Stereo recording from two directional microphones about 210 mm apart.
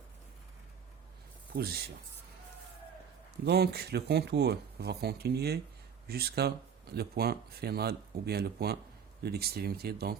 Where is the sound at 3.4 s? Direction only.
50° right (ahead or behind).